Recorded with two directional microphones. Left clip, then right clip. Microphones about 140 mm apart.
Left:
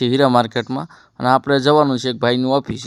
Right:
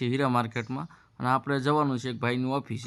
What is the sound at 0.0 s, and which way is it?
Speech, 40° left (ahead or behind).